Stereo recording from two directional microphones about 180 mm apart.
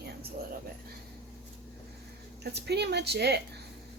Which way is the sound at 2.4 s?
65° right (ahead or behind).